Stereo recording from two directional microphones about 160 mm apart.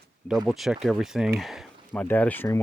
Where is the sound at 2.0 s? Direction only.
10° left (ahead or behind).